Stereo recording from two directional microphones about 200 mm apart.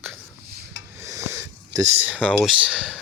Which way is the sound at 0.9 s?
15° right (ahead or behind).